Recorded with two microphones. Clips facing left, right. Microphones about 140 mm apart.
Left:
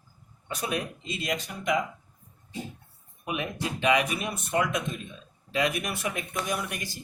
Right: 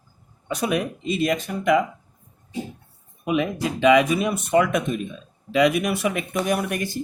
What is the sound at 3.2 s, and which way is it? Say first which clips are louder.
Speech: right 9 dB; 90° right.